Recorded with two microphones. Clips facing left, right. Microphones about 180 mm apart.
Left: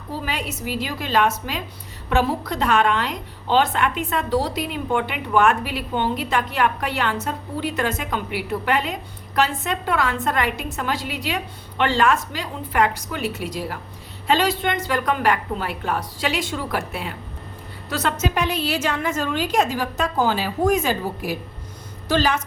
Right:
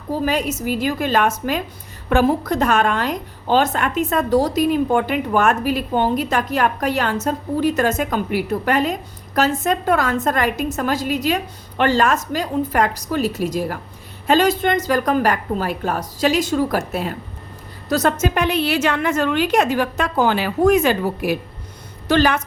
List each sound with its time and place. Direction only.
0.3 s a woman's voice: 45° right (ahead or behind); by 22.4 s 60° right (ahead or behind)